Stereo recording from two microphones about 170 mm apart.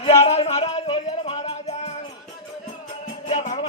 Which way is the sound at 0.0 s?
40° left (ahead or behind).